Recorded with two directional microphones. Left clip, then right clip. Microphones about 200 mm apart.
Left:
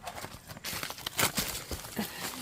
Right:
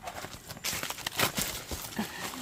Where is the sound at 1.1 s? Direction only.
45° left (ahead or behind).